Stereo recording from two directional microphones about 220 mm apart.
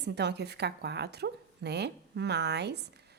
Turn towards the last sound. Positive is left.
turn(degrees=-50)  # may be behind; listen again after turning